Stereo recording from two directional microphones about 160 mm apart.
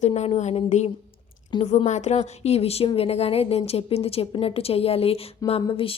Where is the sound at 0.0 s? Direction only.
45° left (ahead or behind).